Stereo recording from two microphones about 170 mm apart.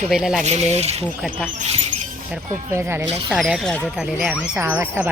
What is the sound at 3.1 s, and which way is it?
Speech, 35° right (ahead or behind).